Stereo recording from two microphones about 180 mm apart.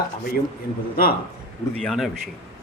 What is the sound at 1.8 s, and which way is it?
Speech, centre (ahead or behind).